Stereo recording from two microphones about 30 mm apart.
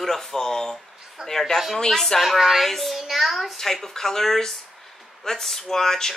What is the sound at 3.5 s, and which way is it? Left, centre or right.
Speech, centre.